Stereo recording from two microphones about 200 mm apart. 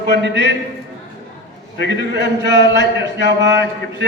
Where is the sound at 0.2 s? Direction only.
60° right (ahead or behind).